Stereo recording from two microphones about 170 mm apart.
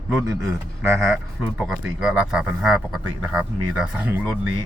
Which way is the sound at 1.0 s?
5° right (ahead or behind).